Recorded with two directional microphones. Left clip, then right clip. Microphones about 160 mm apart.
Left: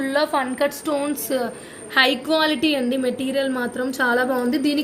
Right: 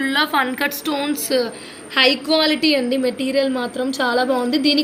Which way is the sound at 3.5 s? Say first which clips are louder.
Right 2 dB; 45° left (ahead or behind).